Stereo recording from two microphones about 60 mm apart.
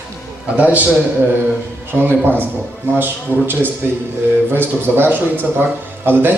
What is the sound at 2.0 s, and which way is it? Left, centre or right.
A man's voice, right.